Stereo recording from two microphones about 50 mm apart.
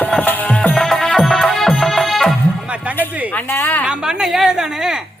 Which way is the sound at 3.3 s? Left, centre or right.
Left.